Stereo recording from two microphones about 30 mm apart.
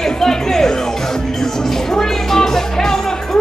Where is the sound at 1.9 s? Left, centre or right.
Centre.